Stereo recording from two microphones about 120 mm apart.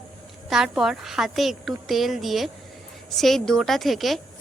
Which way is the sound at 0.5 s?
5° right (ahead or behind).